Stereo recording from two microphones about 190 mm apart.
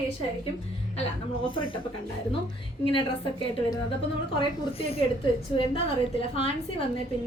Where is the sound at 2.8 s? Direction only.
25° left (ahead or behind).